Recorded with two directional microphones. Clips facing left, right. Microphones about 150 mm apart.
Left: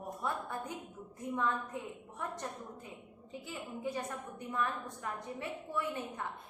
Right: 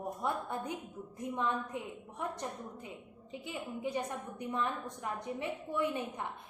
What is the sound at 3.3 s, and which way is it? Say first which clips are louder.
A woman's voice: right 2 dB; 20° right (ahead or behind).